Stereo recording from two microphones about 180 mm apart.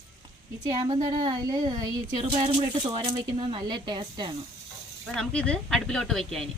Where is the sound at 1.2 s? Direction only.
20° right (ahead or behind).